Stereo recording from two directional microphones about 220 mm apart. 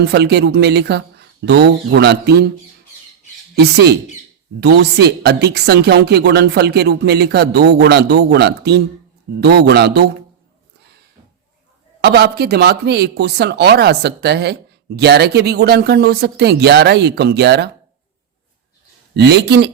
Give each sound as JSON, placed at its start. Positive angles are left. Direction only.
{"t": 0.0, "sound": "speech", "side_deg": -50}
{"t": 3.5, "sound": "speech", "side_deg": -45}
{"t": 12.0, "sound": "speech", "side_deg": -45}
{"t": 19.1, "sound": "speech", "side_deg": -50}